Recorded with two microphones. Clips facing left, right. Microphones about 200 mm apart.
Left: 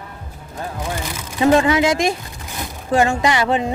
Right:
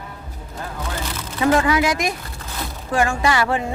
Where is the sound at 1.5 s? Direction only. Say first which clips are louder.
Left 3 dB; 25° left (ahead or behind).